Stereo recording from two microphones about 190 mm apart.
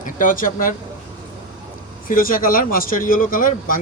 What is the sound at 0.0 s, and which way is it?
Speech, 45° left (ahead or behind).